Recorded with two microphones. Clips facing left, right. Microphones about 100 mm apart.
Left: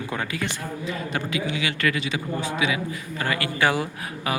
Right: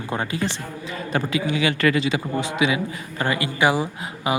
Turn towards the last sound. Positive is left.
turn(degrees=-15)  # may be behind; listen again after turning